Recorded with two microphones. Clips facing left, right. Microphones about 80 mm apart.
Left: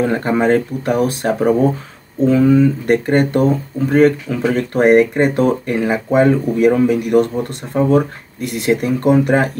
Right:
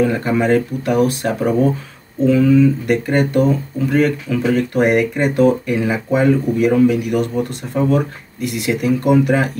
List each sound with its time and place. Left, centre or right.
0.0 s speech: left